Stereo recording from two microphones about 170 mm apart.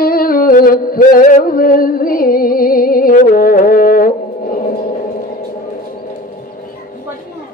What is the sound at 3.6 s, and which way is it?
Music, 55° left (ahead or behind).